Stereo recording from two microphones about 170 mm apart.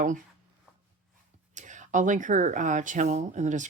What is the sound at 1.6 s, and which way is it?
Speech, 45° right (ahead or behind).